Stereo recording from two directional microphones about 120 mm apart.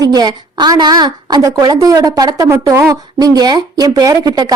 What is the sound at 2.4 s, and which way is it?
Speech, 20° right (ahead or behind).